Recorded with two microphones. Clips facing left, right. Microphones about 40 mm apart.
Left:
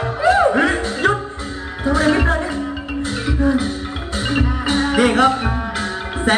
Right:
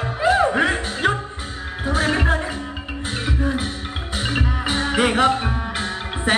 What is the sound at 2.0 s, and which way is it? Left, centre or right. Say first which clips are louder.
Music: left 5 dB; left.